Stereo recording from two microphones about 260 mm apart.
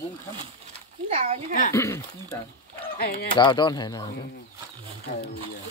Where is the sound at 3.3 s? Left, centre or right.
Centre.